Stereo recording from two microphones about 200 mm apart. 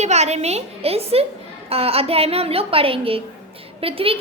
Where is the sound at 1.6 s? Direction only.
30° right (ahead or behind).